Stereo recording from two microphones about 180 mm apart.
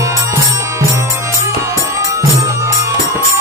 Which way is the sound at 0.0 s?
15° right (ahead or behind).